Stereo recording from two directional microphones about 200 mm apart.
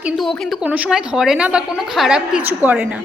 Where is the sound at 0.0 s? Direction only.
Centre (ahead or behind).